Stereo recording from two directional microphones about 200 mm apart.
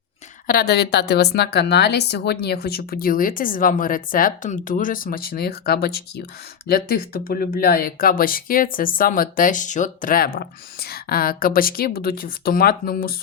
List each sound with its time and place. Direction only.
0.4 s speech: 50° left (ahead or behind)